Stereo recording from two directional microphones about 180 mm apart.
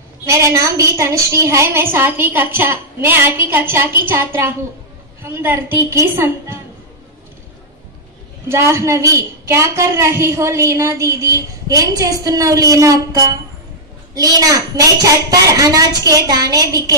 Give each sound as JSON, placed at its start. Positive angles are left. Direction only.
{"t": 0.3, "sound": "a woman's voice", "side_deg": -15}
{"t": 8.5, "sound": "a woman's voice", "side_deg": -15}